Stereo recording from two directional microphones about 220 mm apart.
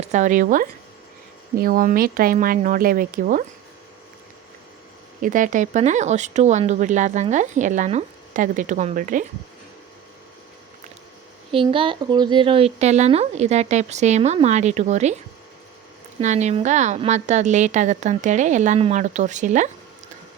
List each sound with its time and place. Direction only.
0.0 s speech: 35° right (ahead or behind)
5.2 s speech: 35° right (ahead or behind)
11.5 s speech: 25° right (ahead or behind)
16.2 s speech: 30° right (ahead or behind)